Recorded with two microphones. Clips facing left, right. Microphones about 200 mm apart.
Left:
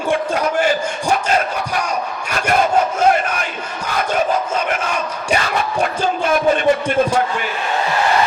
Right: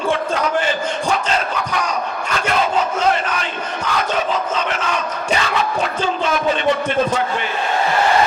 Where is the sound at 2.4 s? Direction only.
50° left (ahead or behind).